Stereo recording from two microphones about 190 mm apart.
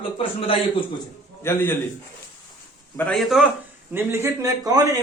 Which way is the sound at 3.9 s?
15° right (ahead or behind).